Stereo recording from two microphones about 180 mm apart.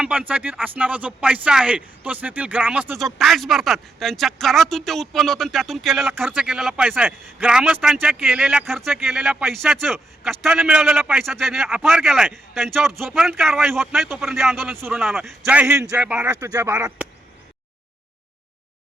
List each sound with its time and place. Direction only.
0.0 s a man's voice: 5° right (ahead or behind)
14.8 s speech: 10° right (ahead or behind)
16.4 s speech: 20° right (ahead or behind)
16.7 s speech: 5° right (ahead or behind)